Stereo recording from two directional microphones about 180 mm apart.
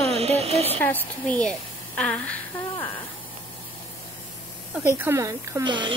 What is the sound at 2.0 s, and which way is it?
Humming, 5° left (ahead or behind).